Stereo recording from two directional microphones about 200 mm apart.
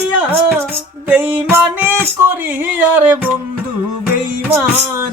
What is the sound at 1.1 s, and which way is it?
Music, 5° right (ahead or behind).